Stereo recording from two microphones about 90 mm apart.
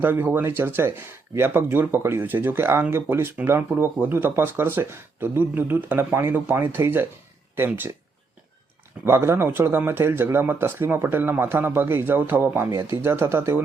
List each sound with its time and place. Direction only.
0.0 s speech: 20° right (ahead or behind)
9.0 s speech: 30° right (ahead or behind)